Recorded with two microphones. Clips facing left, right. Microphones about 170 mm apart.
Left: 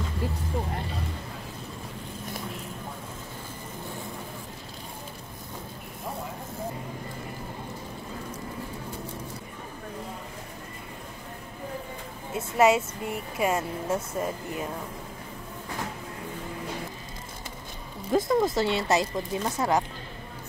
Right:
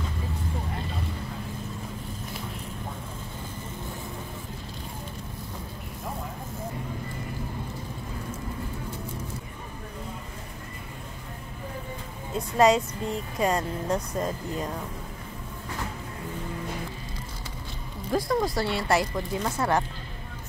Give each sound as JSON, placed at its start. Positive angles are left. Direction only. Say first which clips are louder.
{"t": 12.4, "sound": "speech", "louder": "right 1 dB", "side_deg": 5}
{"t": 18.1, "sound": "speech", "louder": "left 2 dB", "side_deg": 20}